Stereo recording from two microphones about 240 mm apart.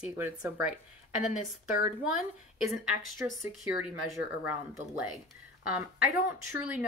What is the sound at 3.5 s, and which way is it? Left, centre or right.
Speech, centre.